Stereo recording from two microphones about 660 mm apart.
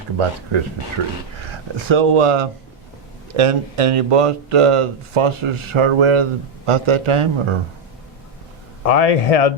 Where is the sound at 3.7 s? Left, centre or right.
Right.